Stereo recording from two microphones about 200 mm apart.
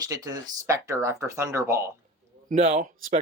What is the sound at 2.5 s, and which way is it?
Speech, 30° right (ahead or behind).